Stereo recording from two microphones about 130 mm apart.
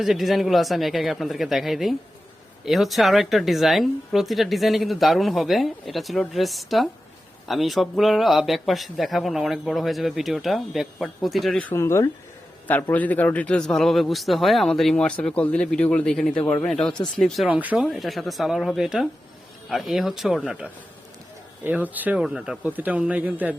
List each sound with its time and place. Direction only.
0.0 s a woman's voice: centre (ahead or behind)
11.6 s a man's voice: 20° left (ahead or behind); by 17.6 s centre (ahead or behind)
17.6 s speech: 10° right (ahead or behind)
17.8 s a woman's voice: centre (ahead or behind)